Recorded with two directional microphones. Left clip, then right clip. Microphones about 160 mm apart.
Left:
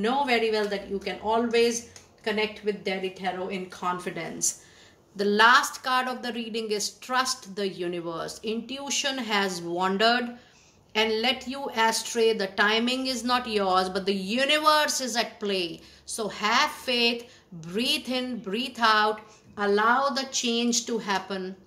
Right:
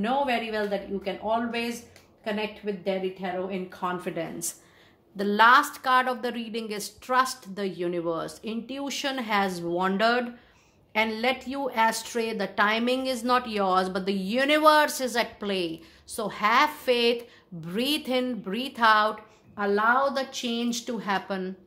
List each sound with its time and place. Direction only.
0.0 s a woman's voice: 40° right (ahead or behind)